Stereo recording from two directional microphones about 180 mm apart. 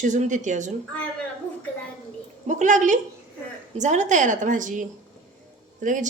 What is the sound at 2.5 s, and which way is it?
Speech, 45° right (ahead or behind).